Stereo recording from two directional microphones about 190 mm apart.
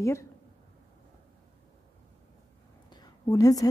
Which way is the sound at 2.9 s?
20° left (ahead or behind).